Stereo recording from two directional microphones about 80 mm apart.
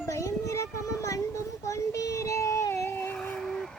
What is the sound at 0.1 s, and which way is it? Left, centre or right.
Child singing, left.